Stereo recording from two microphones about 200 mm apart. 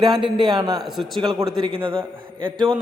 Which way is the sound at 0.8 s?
Centre (ahead or behind).